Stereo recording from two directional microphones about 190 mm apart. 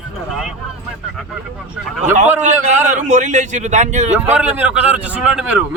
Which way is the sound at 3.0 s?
40° right (ahead or behind).